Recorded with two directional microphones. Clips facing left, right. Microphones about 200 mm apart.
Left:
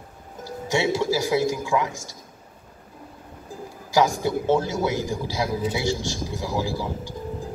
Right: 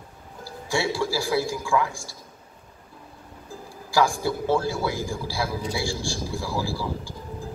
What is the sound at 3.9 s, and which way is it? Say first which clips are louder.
A man's voice: left 2 dB; 20° left (ahead or behind).